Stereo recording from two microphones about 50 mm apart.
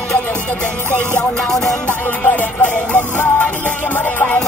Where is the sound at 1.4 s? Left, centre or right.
Centre.